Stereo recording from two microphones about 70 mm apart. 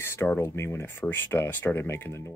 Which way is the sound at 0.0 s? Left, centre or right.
Left.